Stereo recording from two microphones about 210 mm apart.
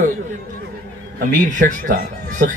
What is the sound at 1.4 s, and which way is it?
Speech, 35° right (ahead or behind).